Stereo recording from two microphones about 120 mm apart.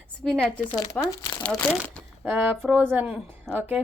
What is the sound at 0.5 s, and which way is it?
Speech, 40° left (ahead or behind).